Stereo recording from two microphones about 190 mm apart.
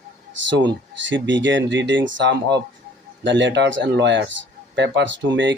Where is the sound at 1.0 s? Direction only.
75° right (ahead or behind).